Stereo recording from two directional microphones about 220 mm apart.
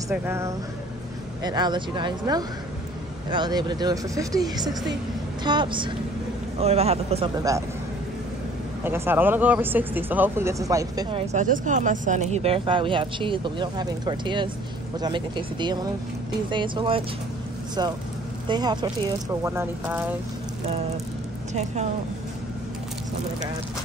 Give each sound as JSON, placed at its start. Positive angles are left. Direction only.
{"t": 0.1, "sound": "speech", "side_deg": -10}
{"t": 8.8, "sound": "speech", "side_deg": -10}
{"t": 11.4, "sound": "speech", "side_deg": -35}
{"t": 18.5, "sound": "speech", "side_deg": -20}
{"t": 20.6, "sound": "speech", "side_deg": -30}